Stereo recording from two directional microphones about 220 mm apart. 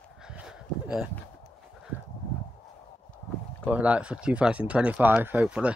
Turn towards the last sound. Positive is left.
turn(degrees=-5)  # may be behind; listen again after turning